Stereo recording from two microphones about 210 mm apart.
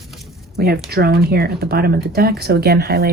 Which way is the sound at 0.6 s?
50° right (ahead or behind).